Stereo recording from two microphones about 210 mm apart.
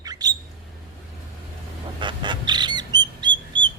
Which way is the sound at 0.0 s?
20° right (ahead or behind).